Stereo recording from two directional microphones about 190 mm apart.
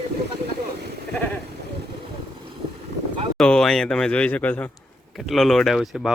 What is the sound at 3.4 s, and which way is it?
A man's voice, 5° left (ahead or behind).